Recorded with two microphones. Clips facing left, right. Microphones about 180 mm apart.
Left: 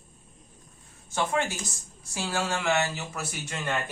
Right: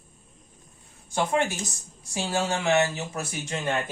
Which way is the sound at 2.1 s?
20° right (ahead or behind).